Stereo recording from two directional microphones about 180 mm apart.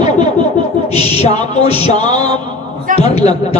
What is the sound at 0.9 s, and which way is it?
Music, 35° left (ahead or behind).